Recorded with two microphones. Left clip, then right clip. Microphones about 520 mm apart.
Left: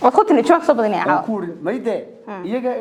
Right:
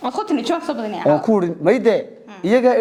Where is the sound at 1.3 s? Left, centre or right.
Right.